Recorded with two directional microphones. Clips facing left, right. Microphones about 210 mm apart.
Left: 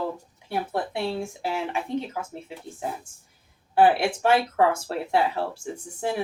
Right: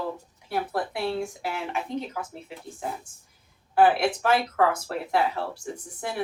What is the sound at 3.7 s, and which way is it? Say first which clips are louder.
Speech: left 1 dB; 25° left (ahead or behind).